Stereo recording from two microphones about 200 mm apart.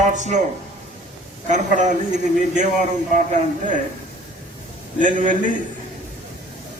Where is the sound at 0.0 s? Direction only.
35° right (ahead or behind).